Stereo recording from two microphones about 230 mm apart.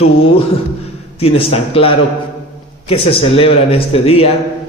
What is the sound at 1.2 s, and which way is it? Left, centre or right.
A man's voice, left.